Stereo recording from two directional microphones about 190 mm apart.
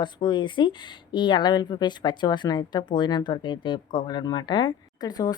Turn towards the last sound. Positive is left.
turn(degrees=20)  # may be behind; listen again after turning